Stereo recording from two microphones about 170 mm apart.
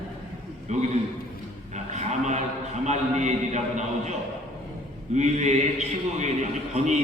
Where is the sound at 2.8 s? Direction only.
45° right (ahead or behind).